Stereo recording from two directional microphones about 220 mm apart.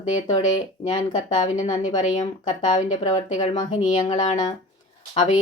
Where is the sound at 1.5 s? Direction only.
35° left (ahead or behind).